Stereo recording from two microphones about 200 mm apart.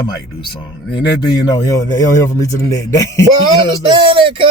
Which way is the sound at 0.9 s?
20° left (ahead or behind).